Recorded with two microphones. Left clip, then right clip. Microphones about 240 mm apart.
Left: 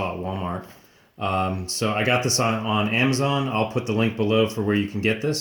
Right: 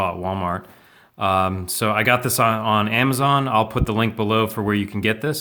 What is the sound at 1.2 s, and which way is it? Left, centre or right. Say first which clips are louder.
Speech: right 5 dB; right.